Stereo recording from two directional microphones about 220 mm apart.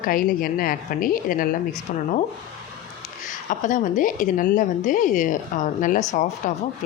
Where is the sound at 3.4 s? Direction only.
35° left (ahead or behind).